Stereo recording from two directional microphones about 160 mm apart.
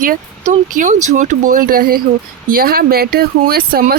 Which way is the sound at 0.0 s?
55° right (ahead or behind).